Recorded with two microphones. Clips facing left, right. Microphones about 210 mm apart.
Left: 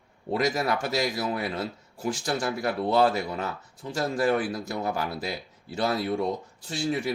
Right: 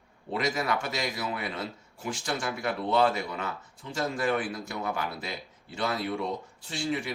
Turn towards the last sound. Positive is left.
turn(degrees=40)  # may be behind; listen again after turning